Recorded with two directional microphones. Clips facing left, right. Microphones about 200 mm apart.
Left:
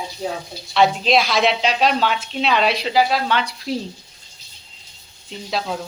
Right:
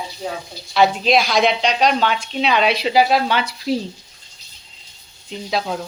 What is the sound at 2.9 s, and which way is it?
Speech, 15° right (ahead or behind).